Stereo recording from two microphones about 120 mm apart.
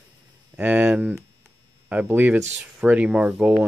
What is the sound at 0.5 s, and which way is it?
Speech, 10° right (ahead or behind).